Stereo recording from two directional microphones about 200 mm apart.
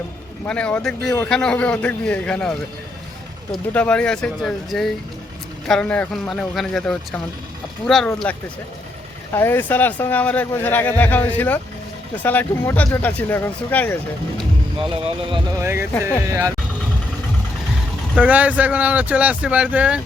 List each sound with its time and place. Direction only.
0.4 s speech: 5° left (ahead or behind)
15.3 s speech: 15° right (ahead or behind)
18.2 s speech: 5° right (ahead or behind)